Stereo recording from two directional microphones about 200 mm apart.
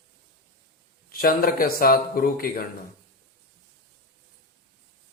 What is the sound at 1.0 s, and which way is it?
A man's voice, 45° left (ahead or behind).